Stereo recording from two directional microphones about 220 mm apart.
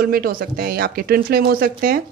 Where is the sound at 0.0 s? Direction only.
40° right (ahead or behind).